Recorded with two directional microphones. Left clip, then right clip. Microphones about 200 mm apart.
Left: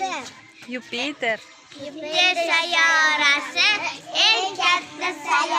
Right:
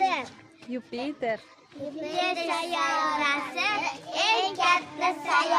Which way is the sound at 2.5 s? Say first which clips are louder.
Left 9 dB; 35° right (ahead or behind).